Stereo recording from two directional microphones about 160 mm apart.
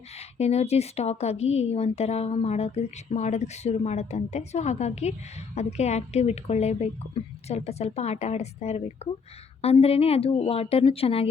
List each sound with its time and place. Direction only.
0.2 s a woman's voice: 40° left (ahead or behind)